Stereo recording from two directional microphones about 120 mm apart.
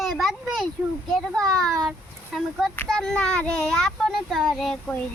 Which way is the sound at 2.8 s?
5° left (ahead or behind).